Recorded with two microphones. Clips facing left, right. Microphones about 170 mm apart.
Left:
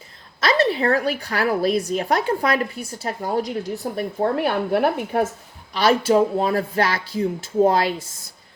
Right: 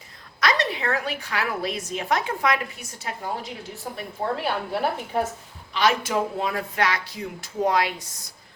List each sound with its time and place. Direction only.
0.3 s a woman's voice: 30° left (ahead or behind); by 5.2 s 55° left (ahead or behind)
5.7 s speech: 35° left (ahead or behind)